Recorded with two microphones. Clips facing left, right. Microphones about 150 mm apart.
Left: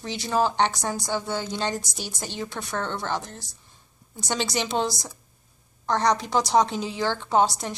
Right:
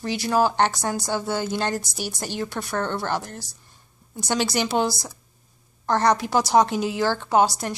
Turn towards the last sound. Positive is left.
turn(degrees=-5)  # may be behind; listen again after turning